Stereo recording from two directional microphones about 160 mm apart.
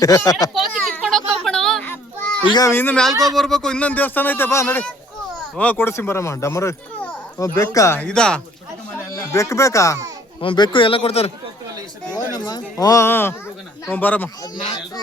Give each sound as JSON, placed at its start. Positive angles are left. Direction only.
{"t": 0.0, "sound": "speech", "side_deg": 20}
{"t": 0.9, "sound": "children playing", "side_deg": 5}
{"t": 2.4, "sound": "speech", "side_deg": 25}
{"t": 2.7, "sound": "speech", "side_deg": 10}
{"t": 8.0, "sound": "speech", "side_deg": 5}
{"t": 9.3, "sound": "speech", "side_deg": 20}
{"t": 10.4, "sound": "speech", "side_deg": 30}
{"t": 12.1, "sound": "speech", "side_deg": 25}
{"t": 14.4, "sound": "speech", "side_deg": 25}